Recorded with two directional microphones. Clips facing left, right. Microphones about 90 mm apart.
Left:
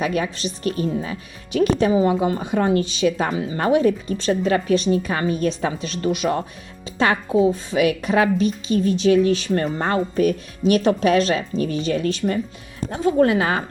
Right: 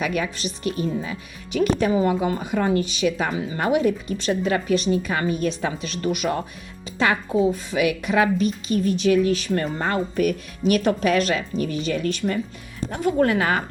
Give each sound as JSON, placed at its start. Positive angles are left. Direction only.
{"t": 0.0, "sound": "a woman's voice", "side_deg": 35}